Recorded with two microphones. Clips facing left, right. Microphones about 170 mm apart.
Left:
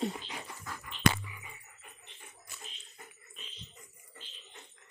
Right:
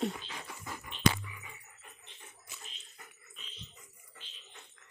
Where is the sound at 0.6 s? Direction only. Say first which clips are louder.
Even; 15° right (ahead or behind).